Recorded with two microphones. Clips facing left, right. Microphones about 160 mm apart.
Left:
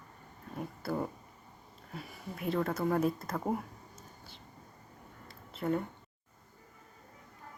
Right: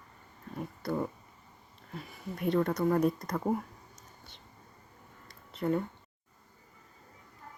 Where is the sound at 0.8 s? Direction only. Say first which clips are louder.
Right 2 dB; 5° left (ahead or behind).